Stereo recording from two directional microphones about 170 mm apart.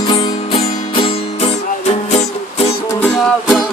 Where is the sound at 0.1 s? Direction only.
35° left (ahead or behind).